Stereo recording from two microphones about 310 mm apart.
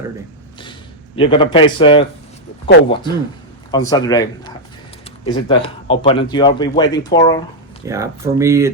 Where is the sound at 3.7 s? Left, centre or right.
Centre.